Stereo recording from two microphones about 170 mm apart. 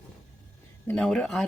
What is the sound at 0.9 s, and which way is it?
Speech, 5° left (ahead or behind).